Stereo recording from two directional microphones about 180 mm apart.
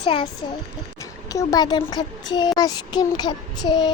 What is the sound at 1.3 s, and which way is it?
Child singing, 20° left (ahead or behind).